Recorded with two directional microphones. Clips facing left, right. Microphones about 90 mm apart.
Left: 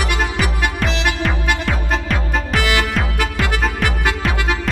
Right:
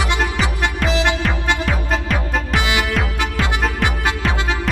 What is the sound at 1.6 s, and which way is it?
Music, centre (ahead or behind).